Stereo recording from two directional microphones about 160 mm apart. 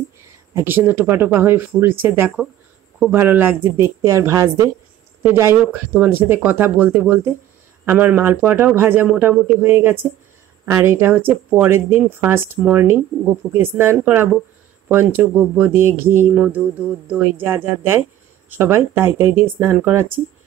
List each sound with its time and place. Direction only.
0.6 s speech: 15° right (ahead or behind)